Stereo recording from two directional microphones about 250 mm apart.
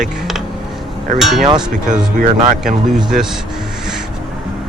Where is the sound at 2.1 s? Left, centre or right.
Right.